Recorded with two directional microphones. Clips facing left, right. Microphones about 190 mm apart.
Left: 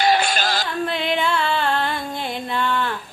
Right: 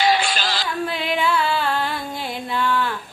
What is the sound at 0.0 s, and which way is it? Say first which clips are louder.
Female singing: left 1 dB; 45° left (ahead or behind).